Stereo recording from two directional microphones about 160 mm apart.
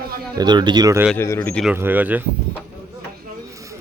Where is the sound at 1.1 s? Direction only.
15° left (ahead or behind).